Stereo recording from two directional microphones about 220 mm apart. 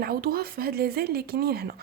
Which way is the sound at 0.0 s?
45° right (ahead or behind).